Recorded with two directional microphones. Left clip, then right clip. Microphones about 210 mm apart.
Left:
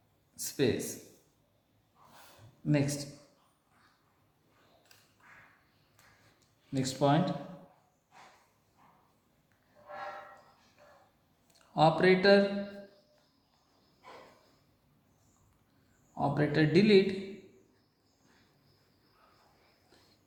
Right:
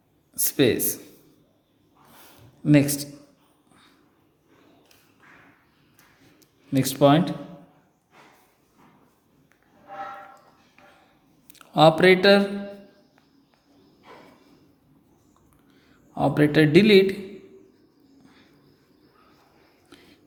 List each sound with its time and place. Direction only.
0.3 s a man's voice: 50° right (ahead or behind)
2.6 s a man's voice: 50° right (ahead or behind)
6.7 s a man's voice: 45° right (ahead or behind)
11.4 s speech: 50° right (ahead or behind)
16.1 s a man's voice: 50° right (ahead or behind)